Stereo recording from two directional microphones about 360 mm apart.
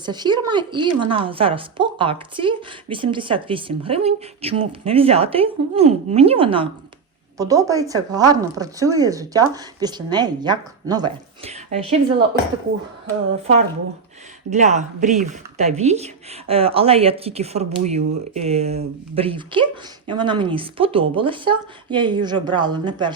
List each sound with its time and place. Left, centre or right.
0.0 s a woman's voice: centre
14.5 s a woman's voice: centre